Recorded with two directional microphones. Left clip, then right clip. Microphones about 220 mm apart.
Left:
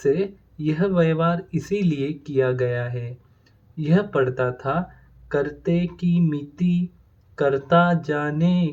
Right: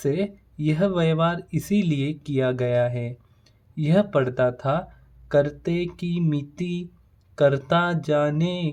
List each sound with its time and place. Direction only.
0.0 s speech: 45° right (ahead or behind)